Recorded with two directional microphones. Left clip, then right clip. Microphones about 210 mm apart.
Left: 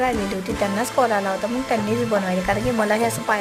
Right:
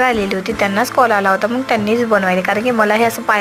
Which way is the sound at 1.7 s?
5° right (ahead or behind).